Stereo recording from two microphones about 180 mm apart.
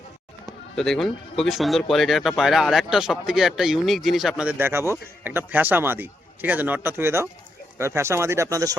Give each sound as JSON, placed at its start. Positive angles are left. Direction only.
{"t": 0.8, "sound": "speech", "side_deg": 0}